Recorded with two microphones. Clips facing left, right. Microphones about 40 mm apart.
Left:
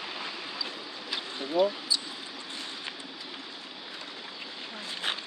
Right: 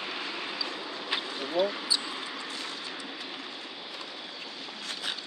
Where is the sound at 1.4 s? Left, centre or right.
Centre.